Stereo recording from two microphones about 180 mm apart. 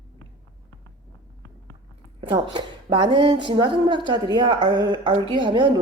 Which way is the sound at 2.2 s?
25° right (ahead or behind).